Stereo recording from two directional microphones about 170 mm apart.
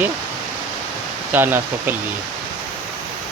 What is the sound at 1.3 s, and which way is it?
Speech, 10° right (ahead or behind).